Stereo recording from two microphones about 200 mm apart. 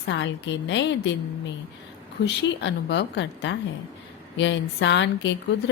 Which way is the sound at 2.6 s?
60° left (ahead or behind).